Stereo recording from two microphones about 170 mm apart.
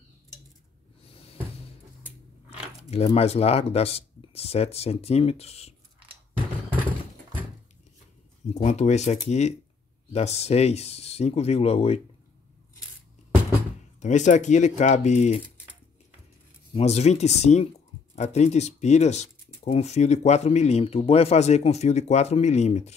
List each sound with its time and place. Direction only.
2.9 s speech: 35° left (ahead or behind)
8.6 s speech: 40° left (ahead or behind)
13.9 s speech: 45° left (ahead or behind)
16.7 s speech: 40° left (ahead or behind)